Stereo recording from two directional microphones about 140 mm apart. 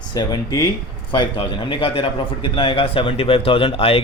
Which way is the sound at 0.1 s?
30° left (ahead or behind).